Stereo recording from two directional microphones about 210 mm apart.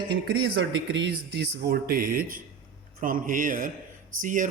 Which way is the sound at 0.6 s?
60° right (ahead or behind).